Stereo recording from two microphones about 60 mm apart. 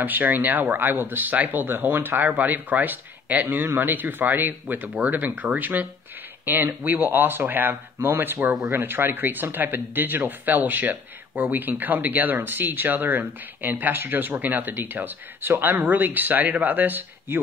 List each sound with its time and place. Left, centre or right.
0.0 s speech: right